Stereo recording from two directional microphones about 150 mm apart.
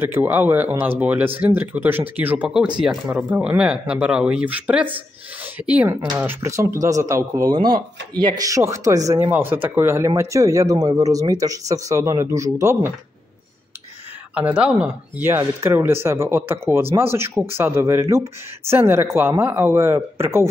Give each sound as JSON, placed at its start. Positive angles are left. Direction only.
{"t": 0.0, "sound": "speech", "side_deg": -15}
{"t": 14.3, "sound": "speech", "side_deg": -10}